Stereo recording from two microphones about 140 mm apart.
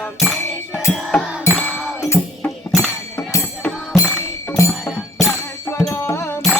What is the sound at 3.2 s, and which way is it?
Music, 20° left (ahead or behind).